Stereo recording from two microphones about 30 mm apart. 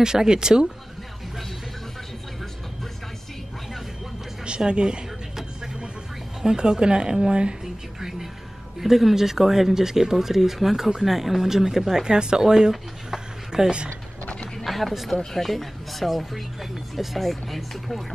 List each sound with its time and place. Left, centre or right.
0.0 s speech: right
4.6 s speech: right
6.4 s speech: right
8.0 s music: centre
8.7 s speech: centre
13.8 s a sound: left
14.6 s speech: centre